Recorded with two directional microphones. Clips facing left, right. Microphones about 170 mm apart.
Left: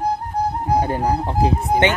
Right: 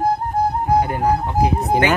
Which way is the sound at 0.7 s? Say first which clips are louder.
Right 1 dB; 30° left (ahead or behind).